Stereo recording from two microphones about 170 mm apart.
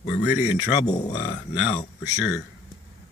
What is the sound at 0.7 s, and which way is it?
Speech, 45° left (ahead or behind).